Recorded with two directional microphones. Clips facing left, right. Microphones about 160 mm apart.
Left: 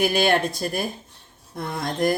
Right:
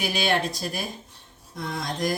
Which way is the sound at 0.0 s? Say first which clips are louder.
Left 5 dB; 50° left (ahead or behind).